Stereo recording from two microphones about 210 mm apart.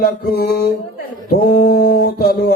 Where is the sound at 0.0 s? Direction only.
50° left (ahead or behind).